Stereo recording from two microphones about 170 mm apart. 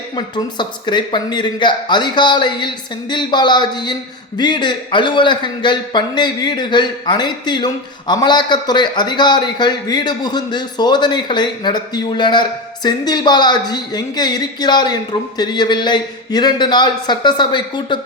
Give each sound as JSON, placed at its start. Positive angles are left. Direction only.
{"t": 0.2, "sound": "a man's voice", "side_deg": 25}